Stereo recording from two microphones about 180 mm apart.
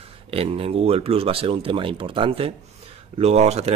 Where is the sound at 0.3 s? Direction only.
35° right (ahead or behind).